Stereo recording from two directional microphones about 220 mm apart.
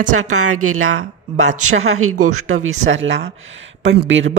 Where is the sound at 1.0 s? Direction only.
30° right (ahead or behind).